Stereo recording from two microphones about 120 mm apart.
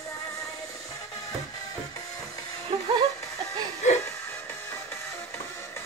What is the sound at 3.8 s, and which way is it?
Music, 80° left.